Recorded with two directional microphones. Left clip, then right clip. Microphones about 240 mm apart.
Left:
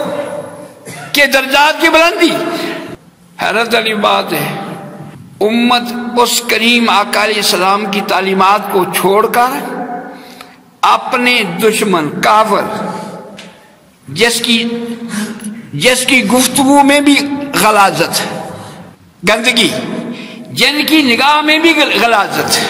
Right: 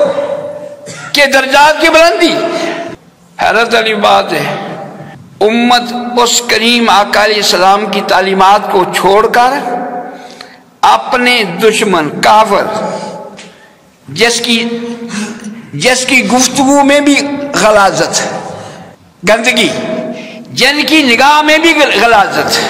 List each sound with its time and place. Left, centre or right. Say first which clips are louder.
1.1 s a man's voice: right 2 dB; left
10.8 s a man's voice: right 3 dB; left
14.1 s a man's voice: right 2 dB; left
15.8 s a man's voice: right 1 dB; left